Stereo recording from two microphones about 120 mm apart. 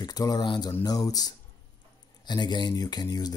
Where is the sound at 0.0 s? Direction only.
35° left (ahead or behind).